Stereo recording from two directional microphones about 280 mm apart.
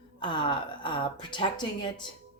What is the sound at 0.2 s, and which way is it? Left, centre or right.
Speech, centre.